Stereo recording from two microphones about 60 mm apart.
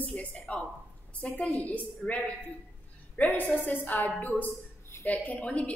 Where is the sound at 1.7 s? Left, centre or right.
Left.